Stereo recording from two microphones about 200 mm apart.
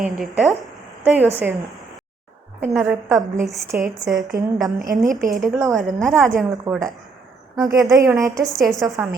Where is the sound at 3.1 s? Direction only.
15° right (ahead or behind).